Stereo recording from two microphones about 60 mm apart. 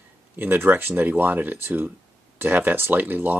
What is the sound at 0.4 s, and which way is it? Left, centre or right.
Speech, right.